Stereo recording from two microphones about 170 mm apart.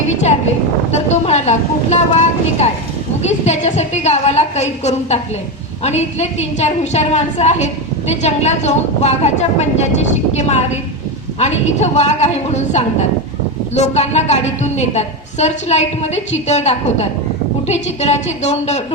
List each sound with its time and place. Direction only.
0.9 s a woman's voice: 40° left (ahead or behind)
11.3 s a woman's voice: 40° left (ahead or behind)